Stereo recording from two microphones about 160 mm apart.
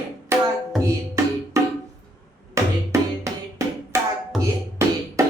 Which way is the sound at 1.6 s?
20° right (ahead or behind).